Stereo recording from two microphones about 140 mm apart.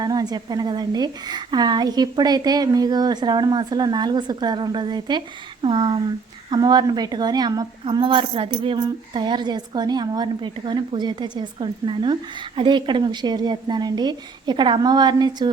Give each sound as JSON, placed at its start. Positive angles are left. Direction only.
{"t": 0.0, "sound": "a woman's voice", "side_deg": -30}